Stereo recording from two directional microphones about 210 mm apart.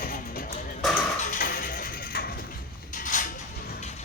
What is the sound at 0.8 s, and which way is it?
Music, centre (ahead or behind).